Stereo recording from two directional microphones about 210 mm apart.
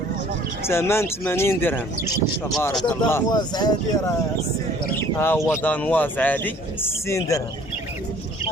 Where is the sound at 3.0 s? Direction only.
15° left (ahead or behind).